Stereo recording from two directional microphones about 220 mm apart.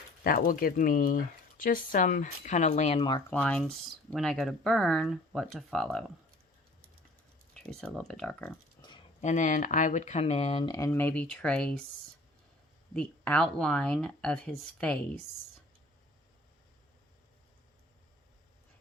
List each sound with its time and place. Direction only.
0.3 s speech: 40° left (ahead or behind); by 3.2 s 25° left (ahead or behind)
3.2 s speech: 5° left (ahead or behind)
7.5 s speech: centre (ahead or behind)
8.8 s a sound: 10° left (ahead or behind)
9.2 s speech: 35° left (ahead or behind); by 11.8 s 5° left (ahead or behind)
12.9 s speech: 5° left (ahead or behind)